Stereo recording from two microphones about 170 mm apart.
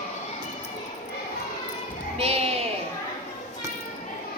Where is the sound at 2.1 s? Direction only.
35° right (ahead or behind).